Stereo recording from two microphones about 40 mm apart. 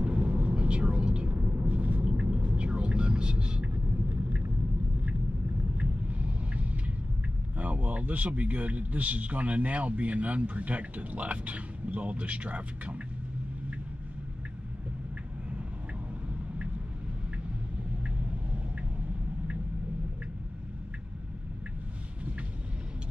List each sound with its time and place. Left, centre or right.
0.0 s vehicle: right
1.3 s vehicle: right
5.8 s vehicle: right
7.5 s speech: right